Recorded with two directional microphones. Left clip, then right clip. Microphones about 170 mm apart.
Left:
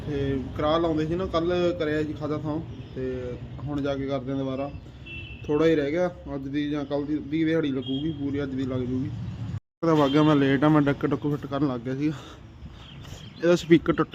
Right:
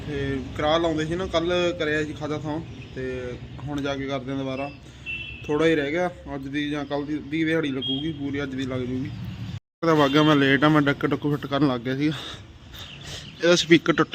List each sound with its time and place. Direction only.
0.1 s a man's voice: 10° left (ahead or behind)
11.3 s speech: 10° right (ahead or behind)
13.4 s a man's voice: centre (ahead or behind)